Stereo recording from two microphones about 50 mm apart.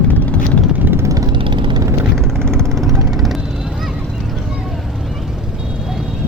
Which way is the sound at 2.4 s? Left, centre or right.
Centre.